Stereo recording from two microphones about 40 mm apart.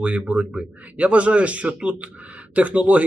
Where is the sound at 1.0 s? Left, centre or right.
Right.